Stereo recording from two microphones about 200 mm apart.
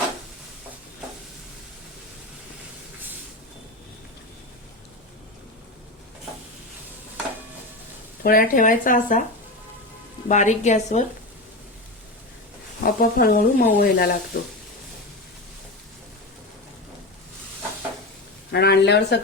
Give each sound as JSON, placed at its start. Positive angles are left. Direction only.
{"t": 8.2, "sound": "speech", "side_deg": 45}
{"t": 10.2, "sound": "speech", "side_deg": 35}
{"t": 12.8, "sound": "speech", "side_deg": 45}
{"t": 18.5, "sound": "speech", "side_deg": 55}